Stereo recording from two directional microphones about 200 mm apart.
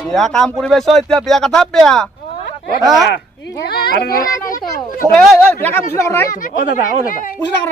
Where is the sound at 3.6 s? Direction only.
50° left (ahead or behind).